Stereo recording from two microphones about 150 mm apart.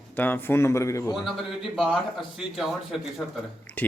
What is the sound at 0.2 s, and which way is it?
Speech, 15° left (ahead or behind).